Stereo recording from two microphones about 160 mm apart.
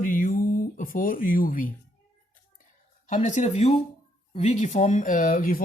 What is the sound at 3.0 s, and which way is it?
Speech, 50° left (ahead or behind).